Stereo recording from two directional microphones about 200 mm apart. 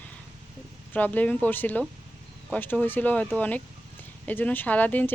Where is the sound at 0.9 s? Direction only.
10° left (ahead or behind).